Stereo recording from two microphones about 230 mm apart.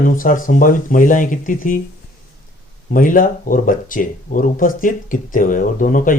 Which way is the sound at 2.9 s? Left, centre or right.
Left.